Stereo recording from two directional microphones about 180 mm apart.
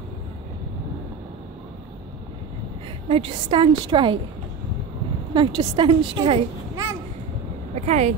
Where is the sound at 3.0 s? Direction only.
30° right (ahead or behind).